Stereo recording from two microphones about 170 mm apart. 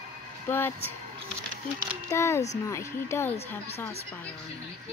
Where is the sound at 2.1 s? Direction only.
15° left (ahead or behind).